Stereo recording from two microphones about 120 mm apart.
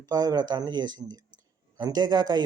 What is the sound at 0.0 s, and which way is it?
Speech, 35° right (ahead or behind).